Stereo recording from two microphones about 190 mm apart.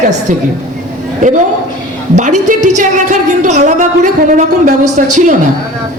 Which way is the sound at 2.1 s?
40° right (ahead or behind).